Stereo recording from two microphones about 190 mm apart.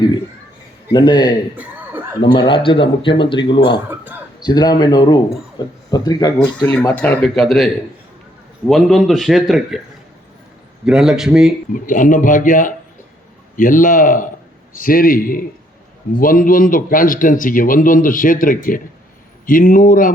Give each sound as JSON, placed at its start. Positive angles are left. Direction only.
{"t": 0.9, "sound": "speech", "side_deg": 25}
{"t": 1.5, "sound": "chuckle", "side_deg": -10}
{"t": 2.2, "sound": "speech", "side_deg": 25}
{"t": 6.9, "sound": "a man's voice", "side_deg": 10}
{"t": 10.8, "sound": "a man's voice", "side_deg": 0}
{"t": 11.7, "sound": "a man's voice", "side_deg": 45}